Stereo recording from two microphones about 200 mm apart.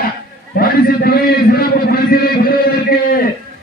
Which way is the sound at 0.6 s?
50° left (ahead or behind).